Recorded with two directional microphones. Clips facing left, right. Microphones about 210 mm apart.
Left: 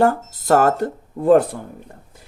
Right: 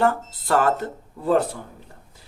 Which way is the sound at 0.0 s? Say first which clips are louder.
Left 4 dB; 45° left (ahead or behind).